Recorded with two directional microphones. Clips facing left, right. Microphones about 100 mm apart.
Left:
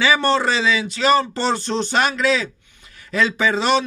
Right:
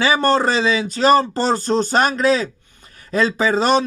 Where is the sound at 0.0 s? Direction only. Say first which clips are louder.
Right 2 dB; 40° right (ahead or behind).